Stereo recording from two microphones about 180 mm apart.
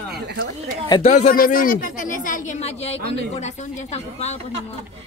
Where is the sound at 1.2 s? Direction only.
50° left (ahead or behind); by 3.5 s 35° left (ahead or behind).